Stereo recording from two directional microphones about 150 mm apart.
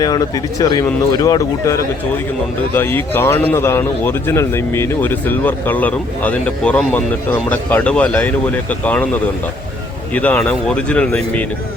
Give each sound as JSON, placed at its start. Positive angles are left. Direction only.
{"t": 0.0, "sound": "speech", "side_deg": 25}
{"t": 10.2, "sound": "speech", "side_deg": 10}